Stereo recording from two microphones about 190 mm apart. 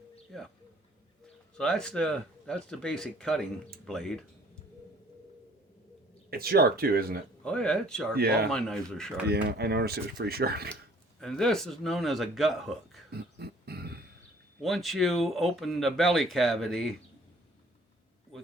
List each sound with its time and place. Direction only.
0.3 s speech: centre (ahead or behind)
1.5 s speech: 5° left (ahead or behind)
6.3 s speech: 55° right (ahead or behind)
7.4 s speech: 5° left (ahead or behind)
8.1 s speech: 55° right (ahead or behind)
8.4 s speech: 5° left (ahead or behind)
9.2 s speech: 60° right (ahead or behind)
11.2 s speech: centre (ahead or behind)
13.1 s a sound: 55° right (ahead or behind)
14.6 s speech: centre (ahead or behind)